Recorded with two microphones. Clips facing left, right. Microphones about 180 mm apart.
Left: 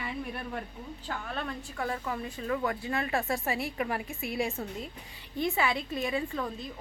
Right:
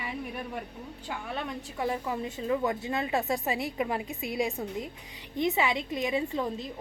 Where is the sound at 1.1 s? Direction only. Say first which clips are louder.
Right 1 dB; 15° right (ahead or behind).